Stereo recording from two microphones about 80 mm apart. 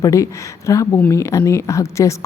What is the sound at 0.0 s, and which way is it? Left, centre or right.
A woman's voice, left.